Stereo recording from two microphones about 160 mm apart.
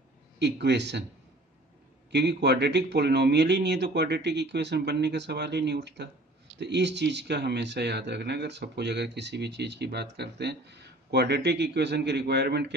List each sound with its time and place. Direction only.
0.4 s speech: 90° right
2.0 s speech: 90° right